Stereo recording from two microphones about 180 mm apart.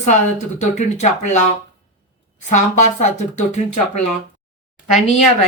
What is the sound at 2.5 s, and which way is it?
Speech, 45° left (ahead or behind).